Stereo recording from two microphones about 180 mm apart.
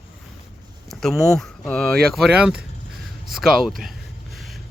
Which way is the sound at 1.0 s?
5° left (ahead or behind).